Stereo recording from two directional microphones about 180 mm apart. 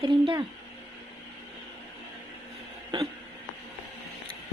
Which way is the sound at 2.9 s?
25° right (ahead or behind).